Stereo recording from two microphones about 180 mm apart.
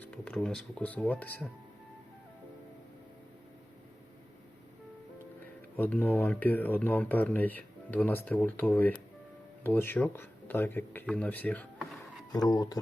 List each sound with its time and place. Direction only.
0.0 s speech: 5° left (ahead or behind)
5.7 s speech: 10° left (ahead or behind)
12.3 s speech: 20° left (ahead or behind)